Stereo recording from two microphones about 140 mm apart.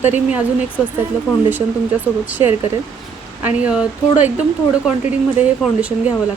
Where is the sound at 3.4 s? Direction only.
10° right (ahead or behind).